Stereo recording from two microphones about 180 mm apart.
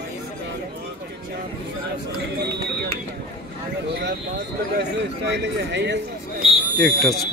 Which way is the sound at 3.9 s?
70° right (ahead or behind).